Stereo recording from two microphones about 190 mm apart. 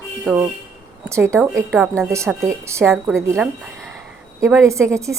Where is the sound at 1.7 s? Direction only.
5° right (ahead or behind).